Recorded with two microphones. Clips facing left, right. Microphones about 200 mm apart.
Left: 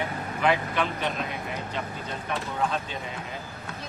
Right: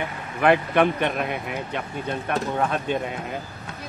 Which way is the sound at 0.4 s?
60° right (ahead or behind).